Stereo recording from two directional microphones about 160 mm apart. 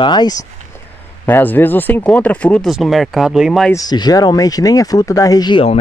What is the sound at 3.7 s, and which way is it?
Speech, 25° left (ahead or behind).